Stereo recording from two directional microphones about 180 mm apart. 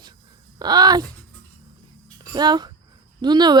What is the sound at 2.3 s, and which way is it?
Child singing, 25° right (ahead or behind).